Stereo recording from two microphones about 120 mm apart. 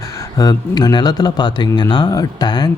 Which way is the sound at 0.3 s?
30° left (ahead or behind).